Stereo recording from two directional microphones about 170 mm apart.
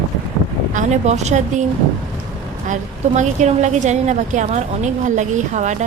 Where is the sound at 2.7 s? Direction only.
45° right (ahead or behind).